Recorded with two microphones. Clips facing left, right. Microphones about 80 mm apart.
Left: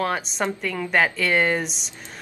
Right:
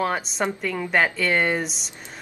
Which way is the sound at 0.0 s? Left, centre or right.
Centre.